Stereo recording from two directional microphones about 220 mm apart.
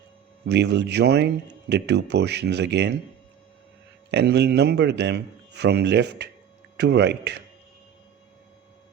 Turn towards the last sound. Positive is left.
turn(degrees=-50)  # may be behind; listen again after turning